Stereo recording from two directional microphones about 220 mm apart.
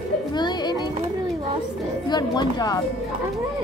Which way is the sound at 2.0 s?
20° left (ahead or behind).